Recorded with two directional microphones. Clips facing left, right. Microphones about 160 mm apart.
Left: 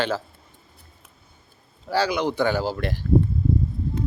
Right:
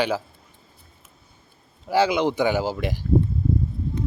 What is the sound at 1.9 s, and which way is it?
A man's voice, 20° right (ahead or behind).